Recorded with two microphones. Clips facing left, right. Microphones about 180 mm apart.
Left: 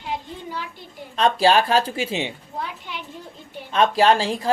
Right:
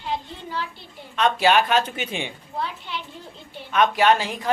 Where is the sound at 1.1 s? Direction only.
35° left (ahead or behind).